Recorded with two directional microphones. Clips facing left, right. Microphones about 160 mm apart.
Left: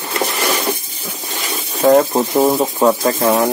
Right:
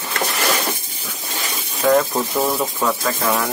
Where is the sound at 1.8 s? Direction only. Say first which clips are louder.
Left 5 dB; 45° left (ahead or behind).